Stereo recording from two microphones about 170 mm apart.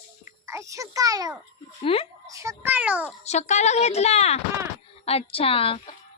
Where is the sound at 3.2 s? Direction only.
40° left (ahead or behind).